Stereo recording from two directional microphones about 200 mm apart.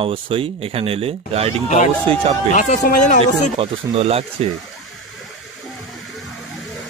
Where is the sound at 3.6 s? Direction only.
30° right (ahead or behind).